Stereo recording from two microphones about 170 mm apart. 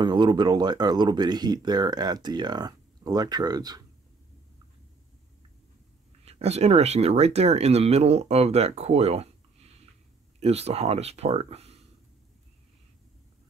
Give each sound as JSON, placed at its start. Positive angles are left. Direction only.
{"t": 0.0, "sound": "speech", "side_deg": -25}
{"t": 6.2, "sound": "speech", "side_deg": -40}
{"t": 10.4, "sound": "speech", "side_deg": -40}